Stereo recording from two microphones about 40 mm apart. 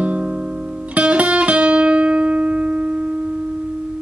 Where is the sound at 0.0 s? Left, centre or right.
Right.